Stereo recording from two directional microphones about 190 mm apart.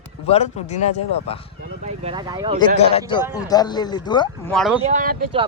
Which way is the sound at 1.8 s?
30° right (ahead or behind).